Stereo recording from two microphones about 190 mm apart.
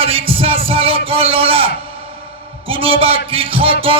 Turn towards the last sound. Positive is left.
turn(degrees=-30)  # may be behind; listen again after turning